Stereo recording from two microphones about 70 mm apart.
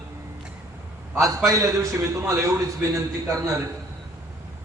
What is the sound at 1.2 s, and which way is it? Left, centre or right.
A man's voice, right.